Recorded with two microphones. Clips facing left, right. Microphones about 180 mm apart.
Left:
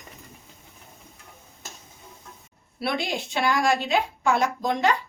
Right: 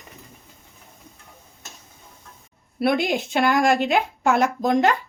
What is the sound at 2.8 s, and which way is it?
A woman's voice, 50° right (ahead or behind).